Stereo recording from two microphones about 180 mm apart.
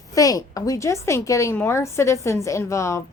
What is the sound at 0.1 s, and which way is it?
A woman's voice, 20° left (ahead or behind).